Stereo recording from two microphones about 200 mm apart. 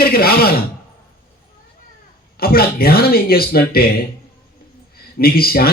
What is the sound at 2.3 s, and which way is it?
A man's voice, 50° left (ahead or behind).